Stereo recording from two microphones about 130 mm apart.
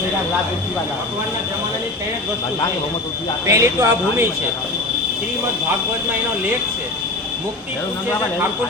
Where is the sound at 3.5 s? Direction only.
25° right (ahead or behind).